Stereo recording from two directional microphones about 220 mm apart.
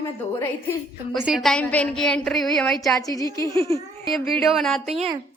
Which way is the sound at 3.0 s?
15° left (ahead or behind).